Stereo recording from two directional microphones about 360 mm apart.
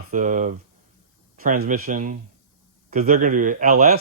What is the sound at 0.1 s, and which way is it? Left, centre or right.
Speech, right.